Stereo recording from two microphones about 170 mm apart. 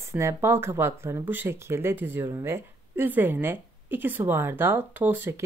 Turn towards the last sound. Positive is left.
turn(degrees=-15)  # may be behind; listen again after turning